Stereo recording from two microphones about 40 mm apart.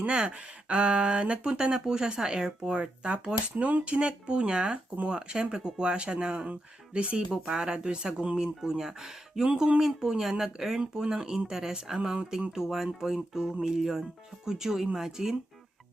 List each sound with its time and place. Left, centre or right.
0.0 s speech: right
1.5 s speech: centre
3.5 s speech: right
3.8 s speech: right; by 9.4 s centre
9.4 s speech: right
9.8 s speech: centre